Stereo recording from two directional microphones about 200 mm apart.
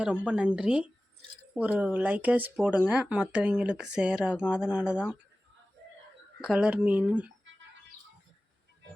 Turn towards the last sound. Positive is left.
turn(degrees=-5)  # may be behind; listen again after turning